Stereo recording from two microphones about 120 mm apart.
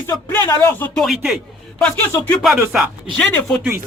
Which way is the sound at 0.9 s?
Centre (ahead or behind).